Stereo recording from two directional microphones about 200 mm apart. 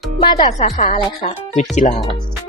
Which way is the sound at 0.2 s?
25° left (ahead or behind).